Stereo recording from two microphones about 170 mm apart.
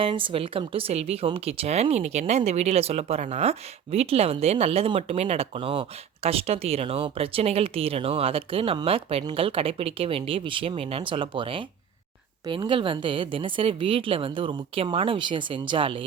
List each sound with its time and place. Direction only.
0.0 s speech: 30° right (ahead or behind)